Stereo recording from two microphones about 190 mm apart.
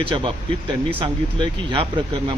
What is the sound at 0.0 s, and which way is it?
Speech, 25° right (ahead or behind).